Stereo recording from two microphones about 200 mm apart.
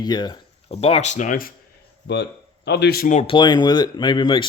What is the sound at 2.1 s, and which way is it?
Speech, 60° left (ahead or behind).